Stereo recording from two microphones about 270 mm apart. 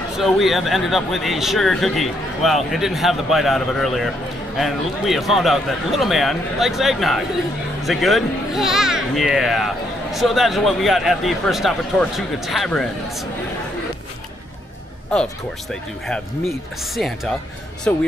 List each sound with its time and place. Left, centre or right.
0.2 s a child's voice: centre
15.7 s speech: centre